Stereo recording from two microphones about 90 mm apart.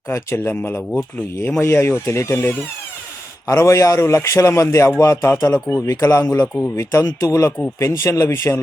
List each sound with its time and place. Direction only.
0.1 s speech: 30° left (ahead or behind)